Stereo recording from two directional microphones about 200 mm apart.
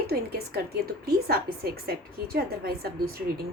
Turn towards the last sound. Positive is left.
turn(degrees=-50)  # may be behind; listen again after turning